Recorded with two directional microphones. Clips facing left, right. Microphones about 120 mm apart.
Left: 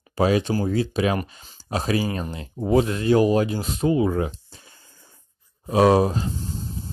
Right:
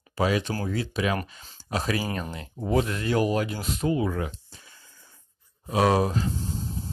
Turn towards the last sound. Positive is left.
turn(degrees=30)  # may be behind; listen again after turning